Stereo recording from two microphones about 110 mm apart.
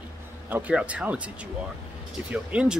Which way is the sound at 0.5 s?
15° right (ahead or behind).